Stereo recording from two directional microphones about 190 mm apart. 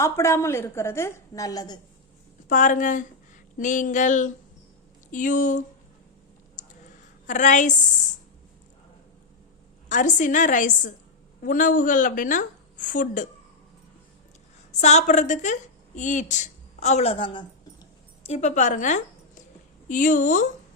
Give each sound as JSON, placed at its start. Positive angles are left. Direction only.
{"t": 0.0, "sound": "a woman's voice", "side_deg": 15}
{"t": 2.5, "sound": "a woman's voice", "side_deg": 40}
{"t": 6.6, "sound": "a sound", "side_deg": 45}
{"t": 7.3, "sound": "a woman's voice", "side_deg": 40}
{"t": 9.9, "sound": "a woman's voice", "side_deg": 40}
{"t": 14.7, "sound": "a woman's voice", "side_deg": 35}
{"t": 18.2, "sound": "a woman's voice", "side_deg": 35}